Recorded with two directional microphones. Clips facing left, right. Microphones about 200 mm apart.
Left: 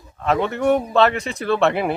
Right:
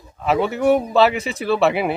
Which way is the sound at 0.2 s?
5° right (ahead or behind).